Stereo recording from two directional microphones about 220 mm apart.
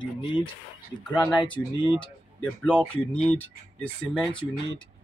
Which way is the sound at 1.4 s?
20° left (ahead or behind).